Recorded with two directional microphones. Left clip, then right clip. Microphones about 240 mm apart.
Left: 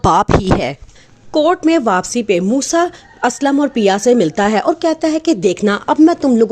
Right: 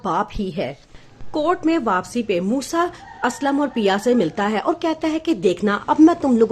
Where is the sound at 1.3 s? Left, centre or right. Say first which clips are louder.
Left 7 dB; left.